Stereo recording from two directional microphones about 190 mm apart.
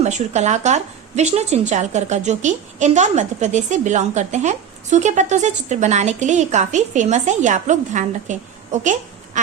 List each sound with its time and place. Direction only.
0.0 s speech: 35° right (ahead or behind)